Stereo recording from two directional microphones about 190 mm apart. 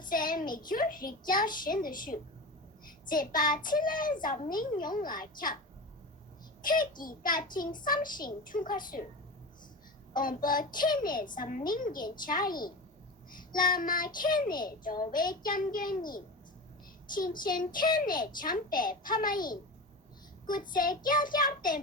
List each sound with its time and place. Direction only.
0.1 s a child's voice: 45° left (ahead or behind)
6.6 s a child's voice: 45° left (ahead or behind)
10.2 s a child's voice: 45° left (ahead or behind)
17.2 s a child's voice: 45° left (ahead or behind)
20.5 s a child's voice: 45° left (ahead or behind)